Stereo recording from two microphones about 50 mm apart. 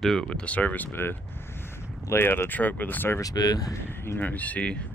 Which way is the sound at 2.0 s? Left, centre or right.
Left.